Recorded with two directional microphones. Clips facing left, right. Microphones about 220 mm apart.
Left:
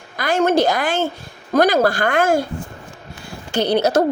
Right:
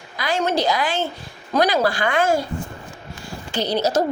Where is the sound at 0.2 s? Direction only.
50° left (ahead or behind).